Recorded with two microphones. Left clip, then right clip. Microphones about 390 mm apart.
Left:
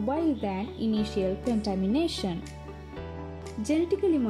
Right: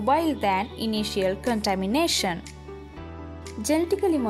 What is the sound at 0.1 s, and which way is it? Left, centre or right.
Speech, right.